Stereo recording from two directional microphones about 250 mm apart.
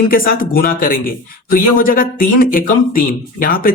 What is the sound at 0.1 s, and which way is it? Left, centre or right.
Speech, left.